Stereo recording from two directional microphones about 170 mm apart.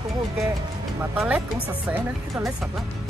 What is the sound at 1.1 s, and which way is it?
Speech, 10° right (ahead or behind).